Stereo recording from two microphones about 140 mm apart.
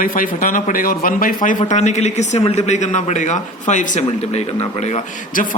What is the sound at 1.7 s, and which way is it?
Speech, 55° left (ahead or behind).